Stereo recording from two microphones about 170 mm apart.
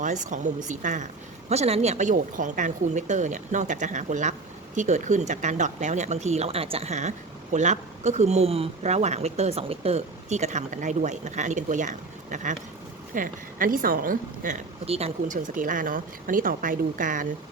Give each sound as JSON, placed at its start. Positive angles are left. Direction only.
{"t": 0.0, "sound": "a woman's voice", "side_deg": -45}
{"t": 14.8, "sound": "a woman's voice", "side_deg": -35}